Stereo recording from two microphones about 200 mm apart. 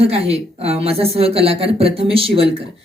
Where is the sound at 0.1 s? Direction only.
30° right (ahead or behind).